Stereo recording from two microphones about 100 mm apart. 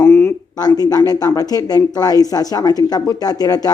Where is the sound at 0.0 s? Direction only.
20° left (ahead or behind).